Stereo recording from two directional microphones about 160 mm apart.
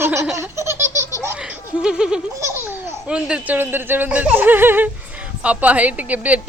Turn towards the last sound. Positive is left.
turn(degrees=-10)  # may be behind; listen again after turning